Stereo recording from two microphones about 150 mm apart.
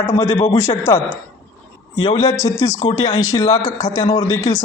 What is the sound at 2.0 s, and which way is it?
A man's voice, 25° left (ahead or behind).